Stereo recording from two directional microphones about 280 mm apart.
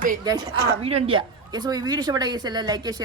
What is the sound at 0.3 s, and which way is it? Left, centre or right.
A woman's voice, centre.